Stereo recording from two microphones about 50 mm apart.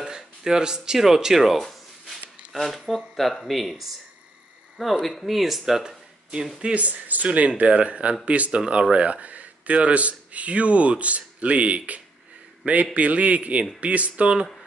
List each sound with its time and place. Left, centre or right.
0.0 s music: centre
3.2 s speech: centre
6.6 s speech: right